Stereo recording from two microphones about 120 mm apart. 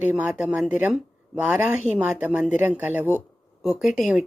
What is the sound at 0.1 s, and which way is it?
A woman's voice, 10° right (ahead or behind).